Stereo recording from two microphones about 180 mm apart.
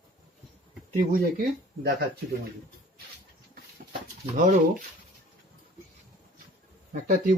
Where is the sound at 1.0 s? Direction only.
50° right (ahead or behind).